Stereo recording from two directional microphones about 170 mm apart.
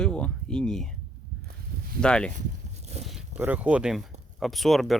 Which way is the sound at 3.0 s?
5° right (ahead or behind).